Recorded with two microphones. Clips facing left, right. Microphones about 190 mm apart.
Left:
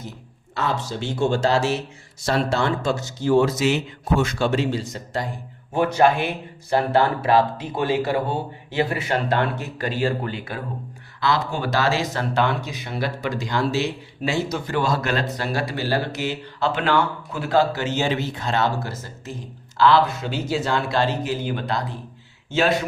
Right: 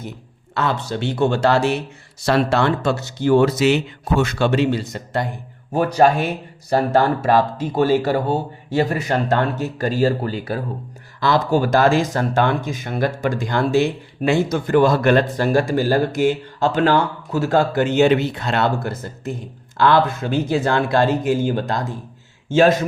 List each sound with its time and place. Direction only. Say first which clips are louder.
0.5 s speech: right 3 dB; 65° right (ahead or behind)
5.7 s speech: right 2 dB; 40° right (ahead or behind)